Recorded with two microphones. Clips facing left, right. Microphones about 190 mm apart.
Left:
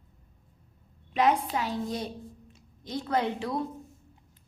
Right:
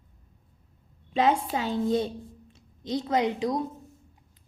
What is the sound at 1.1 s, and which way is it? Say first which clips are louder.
A woman's voice: right 1 dB; 25° right (ahead or behind).